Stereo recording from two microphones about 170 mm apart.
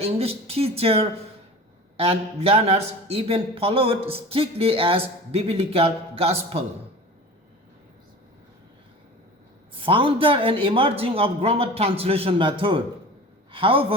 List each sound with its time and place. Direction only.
0.0 s a man's voice: 35° right (ahead or behind)
9.8 s a man's voice: 30° right (ahead or behind)